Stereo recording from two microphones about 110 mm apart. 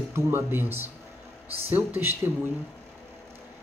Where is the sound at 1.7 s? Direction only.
20° right (ahead or behind).